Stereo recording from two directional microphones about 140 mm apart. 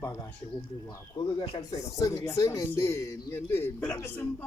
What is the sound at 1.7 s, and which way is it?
A man's voice, 25° left (ahead or behind).